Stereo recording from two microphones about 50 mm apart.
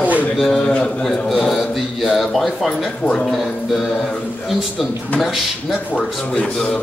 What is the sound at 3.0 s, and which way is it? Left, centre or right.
Speech, left.